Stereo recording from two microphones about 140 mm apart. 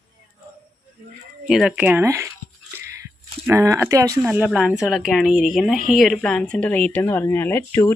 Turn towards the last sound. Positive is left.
turn(degrees=15)  # may be behind; listen again after turning